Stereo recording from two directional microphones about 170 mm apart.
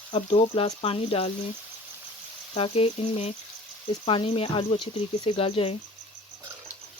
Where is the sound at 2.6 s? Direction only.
35° left (ahead or behind).